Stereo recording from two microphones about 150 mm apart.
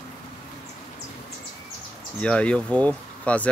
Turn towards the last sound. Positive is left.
turn(degrees=10)  # may be behind; listen again after turning